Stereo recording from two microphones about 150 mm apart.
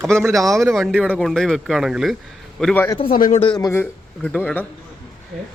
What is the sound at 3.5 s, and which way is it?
Speech, 25° left (ahead or behind).